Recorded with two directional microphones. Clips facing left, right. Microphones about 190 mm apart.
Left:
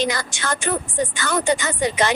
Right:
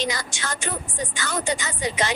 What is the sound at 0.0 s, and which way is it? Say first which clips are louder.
A woman's voice: left 5 dB; 55° left (ahead or behind).